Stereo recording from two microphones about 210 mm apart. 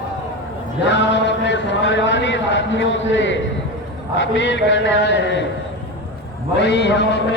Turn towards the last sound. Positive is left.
turn(degrees=55)  # may be behind; listen again after turning